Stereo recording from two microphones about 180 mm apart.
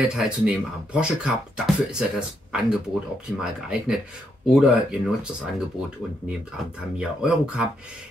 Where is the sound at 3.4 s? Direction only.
5° right (ahead or behind).